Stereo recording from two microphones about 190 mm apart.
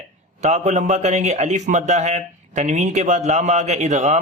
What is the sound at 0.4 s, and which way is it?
A man's voice, 35° right (ahead or behind).